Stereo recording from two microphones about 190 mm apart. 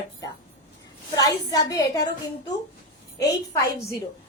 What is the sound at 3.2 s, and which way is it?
Speech, 15° left (ahead or behind).